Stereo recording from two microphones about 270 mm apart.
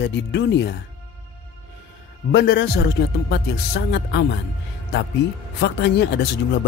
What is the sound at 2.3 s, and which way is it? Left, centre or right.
Speech, left.